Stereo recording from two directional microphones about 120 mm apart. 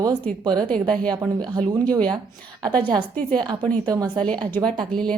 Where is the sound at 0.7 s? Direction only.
10° left (ahead or behind).